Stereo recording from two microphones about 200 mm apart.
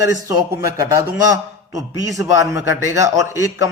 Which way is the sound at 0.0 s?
15° right (ahead or behind).